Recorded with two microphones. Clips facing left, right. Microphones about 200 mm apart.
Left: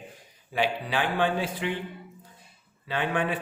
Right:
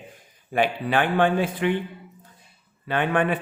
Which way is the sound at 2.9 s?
60° right (ahead or behind).